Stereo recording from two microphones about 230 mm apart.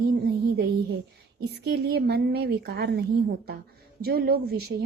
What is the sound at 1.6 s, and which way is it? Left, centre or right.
A woman's voice, right.